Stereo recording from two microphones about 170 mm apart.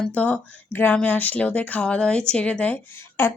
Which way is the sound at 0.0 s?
10° left (ahead or behind).